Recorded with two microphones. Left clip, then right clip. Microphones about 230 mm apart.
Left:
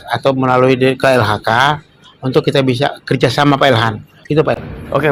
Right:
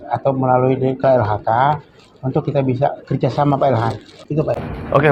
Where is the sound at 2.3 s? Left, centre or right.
Left.